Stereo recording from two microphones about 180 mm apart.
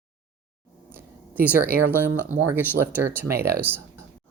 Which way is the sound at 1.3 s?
10° right (ahead or behind).